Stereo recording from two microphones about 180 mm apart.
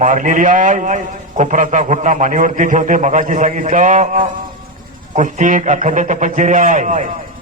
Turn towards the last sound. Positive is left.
turn(degrees=-45)  # may be behind; listen again after turning